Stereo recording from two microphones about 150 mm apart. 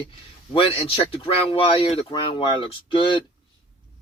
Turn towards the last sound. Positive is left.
turn(degrees=35)  # may be behind; listen again after turning